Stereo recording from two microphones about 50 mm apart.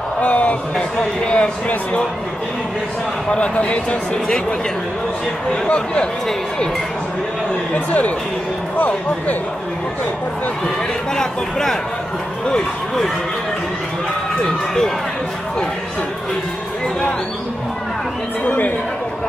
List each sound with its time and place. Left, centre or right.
0.2 s a sound: left
0.7 s speech: centre
3.3 s speech: left
5.5 s speech: left
7.7 s speech: left
11.1 s speech: centre
18.4 s speech: left